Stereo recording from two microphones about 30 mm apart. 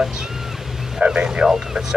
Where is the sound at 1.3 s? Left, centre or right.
Centre.